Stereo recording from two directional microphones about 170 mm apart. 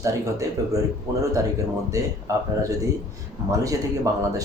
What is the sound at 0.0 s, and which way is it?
Speech, 20° right (ahead or behind).